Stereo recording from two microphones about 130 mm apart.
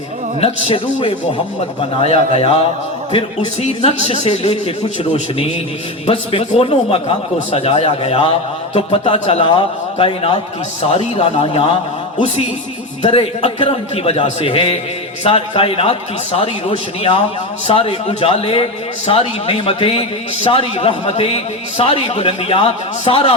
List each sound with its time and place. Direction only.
0.3 s a man's voice: 50° left (ahead or behind)
6.6 s a man's voice: 45° left (ahead or behind)
7.9 s a man's voice: 45° left (ahead or behind)
12.1 s a man's voice: 65° left (ahead or behind)
13.0 s a man's voice: 50° left (ahead or behind)